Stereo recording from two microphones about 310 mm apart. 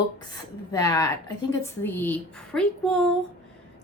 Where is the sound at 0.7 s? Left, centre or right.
Centre.